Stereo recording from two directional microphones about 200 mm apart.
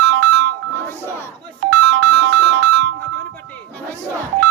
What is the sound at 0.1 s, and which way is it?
Music, 70° right (ahead or behind).